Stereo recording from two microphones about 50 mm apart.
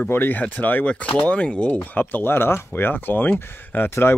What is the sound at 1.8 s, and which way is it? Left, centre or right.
Speech, left.